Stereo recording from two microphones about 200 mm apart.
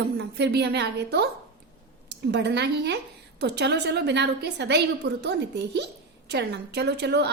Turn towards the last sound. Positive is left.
turn(degrees=-60)  # may be behind; listen again after turning